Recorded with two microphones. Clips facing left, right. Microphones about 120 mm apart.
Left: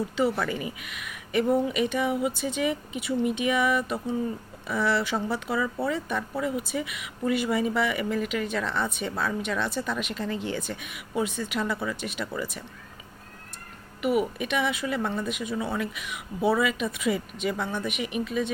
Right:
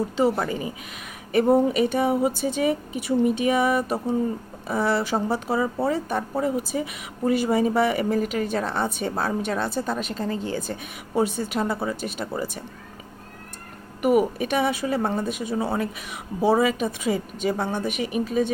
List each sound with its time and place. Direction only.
0.2 s a woman's voice: 35° right (ahead or behind)
14.0 s a woman's voice: 40° right (ahead or behind)